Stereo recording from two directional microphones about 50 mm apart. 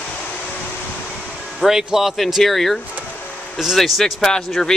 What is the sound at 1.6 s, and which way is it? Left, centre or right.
Speech, centre.